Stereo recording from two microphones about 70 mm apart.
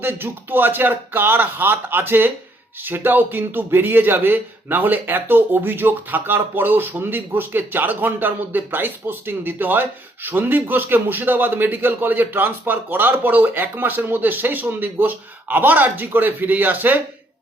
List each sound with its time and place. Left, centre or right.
0.0 s a man's voice: right